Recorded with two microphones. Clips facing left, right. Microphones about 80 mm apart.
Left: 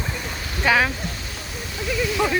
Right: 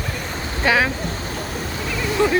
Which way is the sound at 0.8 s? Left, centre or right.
Right.